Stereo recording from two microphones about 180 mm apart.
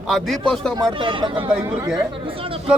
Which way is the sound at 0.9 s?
30° right (ahead or behind).